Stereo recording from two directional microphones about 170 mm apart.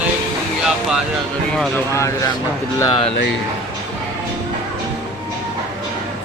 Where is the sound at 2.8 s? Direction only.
30° left (ahead or behind).